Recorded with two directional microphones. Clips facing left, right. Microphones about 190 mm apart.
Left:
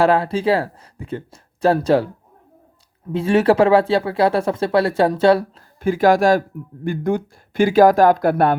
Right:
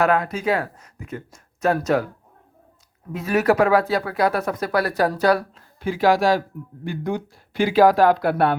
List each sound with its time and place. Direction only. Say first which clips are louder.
0.0 s speech: left 4 dB; 30° left (ahead or behind)
3.1 s speech: left 4 dB; 30° left (ahead or behind)
5.8 s speech: left 4 dB; 50° left (ahead or behind)